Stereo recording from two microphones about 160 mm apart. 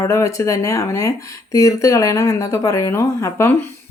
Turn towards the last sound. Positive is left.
turn(degrees=15)  # may be behind; listen again after turning